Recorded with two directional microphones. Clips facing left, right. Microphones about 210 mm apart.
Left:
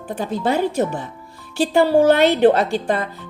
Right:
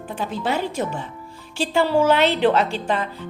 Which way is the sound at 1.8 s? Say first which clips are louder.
Left 4 dB; 50° left (ahead or behind).